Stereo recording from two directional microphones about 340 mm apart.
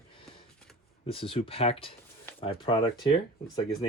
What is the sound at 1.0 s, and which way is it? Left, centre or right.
Speech, centre.